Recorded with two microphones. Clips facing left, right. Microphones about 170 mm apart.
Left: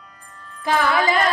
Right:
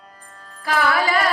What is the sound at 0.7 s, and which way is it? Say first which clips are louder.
Music: left 2 dB; 20° left (ahead or behind).